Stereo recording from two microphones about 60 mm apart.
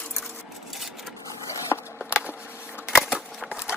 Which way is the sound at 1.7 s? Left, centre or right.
Left.